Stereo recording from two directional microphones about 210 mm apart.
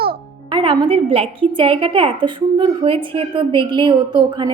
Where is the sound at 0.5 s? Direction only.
25° right (ahead or behind).